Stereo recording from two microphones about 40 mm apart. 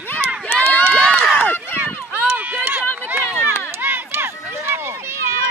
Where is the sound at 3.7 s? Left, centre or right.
Right.